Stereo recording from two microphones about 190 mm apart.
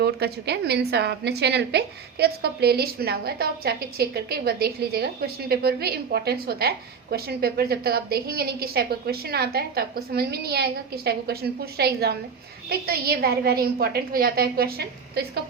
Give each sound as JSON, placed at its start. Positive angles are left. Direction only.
{"t": 0.0, "sound": "a woman's voice", "side_deg": -60}